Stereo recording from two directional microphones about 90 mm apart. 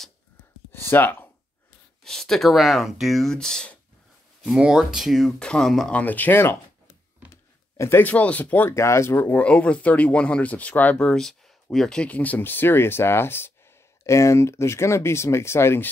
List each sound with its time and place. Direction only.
0.7 s a sound: 25° left (ahead or behind)
2.0 s speech: 5° left (ahead or behind)
4.6 s speech: 5° right (ahead or behind)
5.4 s speech: 10° left (ahead or behind)
5.9 s speech: 20° left (ahead or behind)
7.2 s a sound: 15° right (ahead or behind)
7.7 s a sound: 35° left (ahead or behind)
8.0 s speech: 15° left (ahead or behind)
8.7 s speech: 30° left (ahead or behind)